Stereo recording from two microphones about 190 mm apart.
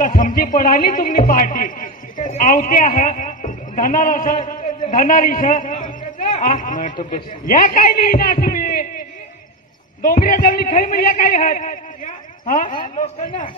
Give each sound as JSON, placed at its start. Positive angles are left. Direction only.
{"t": 0.0, "sound": "a man's voice", "side_deg": 45}
{"t": 10.2, "sound": "a man's voice", "side_deg": 45}